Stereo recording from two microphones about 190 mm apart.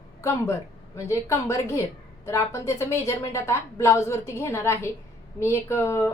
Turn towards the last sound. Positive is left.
turn(degrees=15)  # may be behind; listen again after turning